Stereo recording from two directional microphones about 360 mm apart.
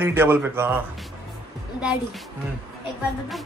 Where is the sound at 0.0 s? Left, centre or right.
Centre.